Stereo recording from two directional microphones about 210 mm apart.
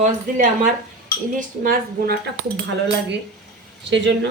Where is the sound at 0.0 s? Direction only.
40° right (ahead or behind).